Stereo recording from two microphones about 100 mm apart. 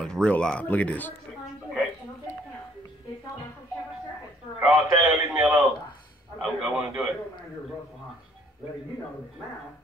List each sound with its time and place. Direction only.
0.0 s speech: 10° left (ahead or behind)
4.6 s a sound: 15° right (ahead or behind)
6.4 s a man's voice: 15° right (ahead or behind)